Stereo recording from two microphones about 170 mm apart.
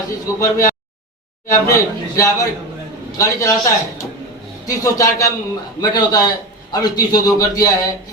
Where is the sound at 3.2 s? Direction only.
20° left (ahead or behind).